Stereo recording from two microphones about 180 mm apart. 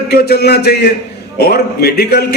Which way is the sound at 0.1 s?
60° left (ahead or behind).